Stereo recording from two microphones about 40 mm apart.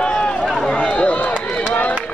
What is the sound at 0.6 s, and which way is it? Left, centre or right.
Speech, left.